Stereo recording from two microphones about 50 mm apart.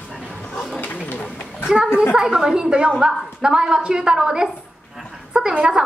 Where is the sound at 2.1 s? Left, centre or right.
Centre.